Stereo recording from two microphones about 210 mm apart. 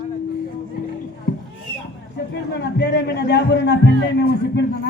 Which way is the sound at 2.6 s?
55° left (ahead or behind).